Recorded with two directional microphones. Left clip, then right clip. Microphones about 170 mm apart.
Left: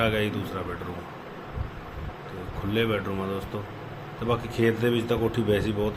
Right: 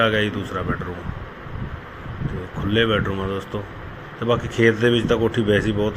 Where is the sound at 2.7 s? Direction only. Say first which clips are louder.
Right 7 dB; 20° right (ahead or behind).